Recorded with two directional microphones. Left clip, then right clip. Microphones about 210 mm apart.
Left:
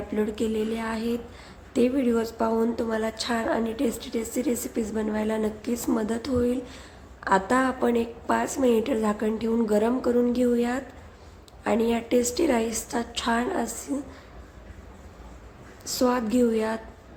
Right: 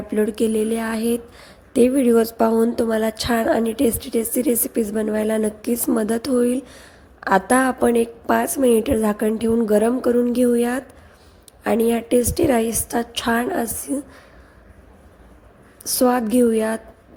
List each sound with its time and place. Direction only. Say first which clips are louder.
0.1 s speech: right 8 dB; 30° right (ahead or behind)
15.8 s speech: right 6 dB; 30° right (ahead or behind)